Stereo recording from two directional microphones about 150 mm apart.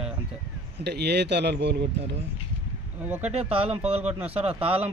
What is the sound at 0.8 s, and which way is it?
Speech, 90° right.